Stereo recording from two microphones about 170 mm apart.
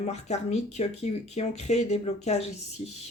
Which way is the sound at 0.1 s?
40° left (ahead or behind).